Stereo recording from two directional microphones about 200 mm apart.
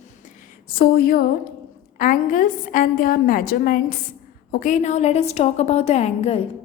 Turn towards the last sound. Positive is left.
turn(degrees=30)  # may be behind; listen again after turning